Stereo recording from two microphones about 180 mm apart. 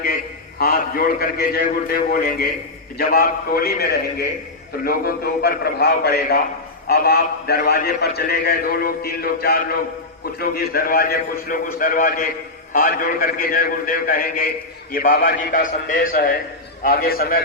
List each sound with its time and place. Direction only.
0.6 s a man's voice: 55° left (ahead or behind)